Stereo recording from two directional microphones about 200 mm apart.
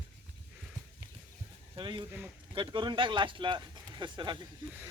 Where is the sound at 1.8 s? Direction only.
20° right (ahead or behind).